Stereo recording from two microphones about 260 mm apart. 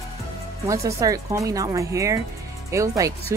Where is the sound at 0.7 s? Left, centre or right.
Centre.